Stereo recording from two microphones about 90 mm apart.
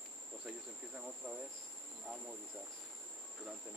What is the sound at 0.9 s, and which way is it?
Speech, 10° right (ahead or behind).